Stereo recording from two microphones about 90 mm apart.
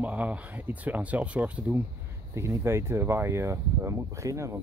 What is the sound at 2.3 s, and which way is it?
Speech, 30° right (ahead or behind).